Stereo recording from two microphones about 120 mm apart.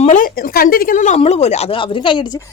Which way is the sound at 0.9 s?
90° left.